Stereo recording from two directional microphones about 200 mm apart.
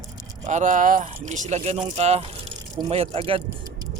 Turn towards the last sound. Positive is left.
turn(degrees=-30)  # may be behind; listen again after turning